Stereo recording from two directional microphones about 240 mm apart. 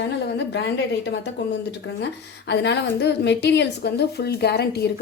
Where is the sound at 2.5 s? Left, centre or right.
Left.